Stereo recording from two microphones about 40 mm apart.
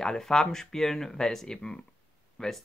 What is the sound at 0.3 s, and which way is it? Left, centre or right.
Speech, centre.